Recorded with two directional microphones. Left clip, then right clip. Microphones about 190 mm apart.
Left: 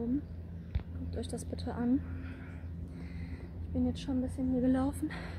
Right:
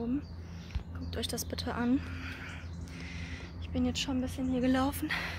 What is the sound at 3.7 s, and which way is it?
A woman's voice, centre (ahead or behind).